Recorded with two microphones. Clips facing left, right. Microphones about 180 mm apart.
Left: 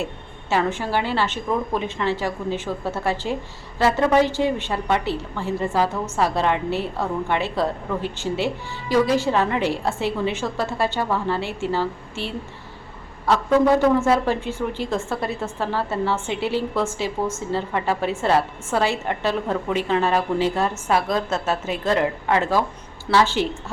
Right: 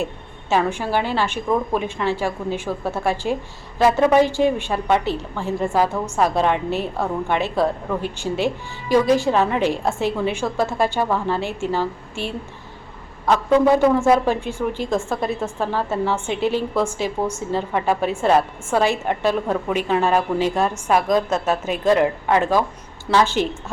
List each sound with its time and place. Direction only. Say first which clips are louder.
0.5 s a woman's voice: right 2 dB; 15° right (ahead or behind)